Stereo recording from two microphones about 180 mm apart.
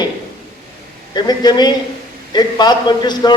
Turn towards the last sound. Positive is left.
turn(degrees=25)  # may be behind; listen again after turning